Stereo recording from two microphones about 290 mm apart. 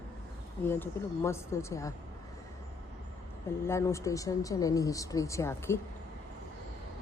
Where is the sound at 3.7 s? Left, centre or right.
Centre.